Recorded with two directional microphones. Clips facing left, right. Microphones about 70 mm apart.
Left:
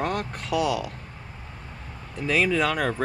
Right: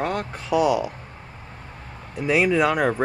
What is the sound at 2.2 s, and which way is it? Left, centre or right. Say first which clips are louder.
Speech: right 4 dB; centre.